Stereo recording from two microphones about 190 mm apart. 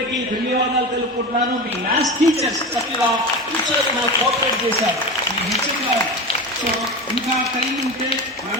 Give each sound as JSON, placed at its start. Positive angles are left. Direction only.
{"t": 2.0, "sound": "a man's voice", "side_deg": -20}